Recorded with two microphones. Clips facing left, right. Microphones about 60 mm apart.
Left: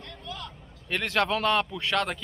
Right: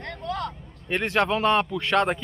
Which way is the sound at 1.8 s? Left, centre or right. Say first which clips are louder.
Right 5 dB; right.